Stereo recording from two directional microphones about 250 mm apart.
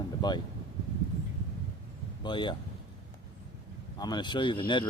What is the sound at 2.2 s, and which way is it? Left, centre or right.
Speech, centre.